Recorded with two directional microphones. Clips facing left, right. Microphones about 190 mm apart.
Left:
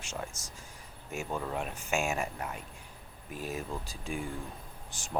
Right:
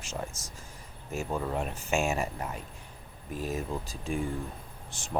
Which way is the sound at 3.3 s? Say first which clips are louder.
Right 4 dB; 40° right (ahead or behind).